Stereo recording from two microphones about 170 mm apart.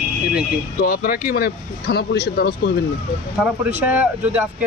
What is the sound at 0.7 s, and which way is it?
Speech, 60° left (ahead or behind).